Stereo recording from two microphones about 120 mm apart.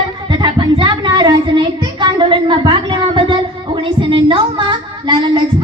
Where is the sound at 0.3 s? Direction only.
40° right (ahead or behind).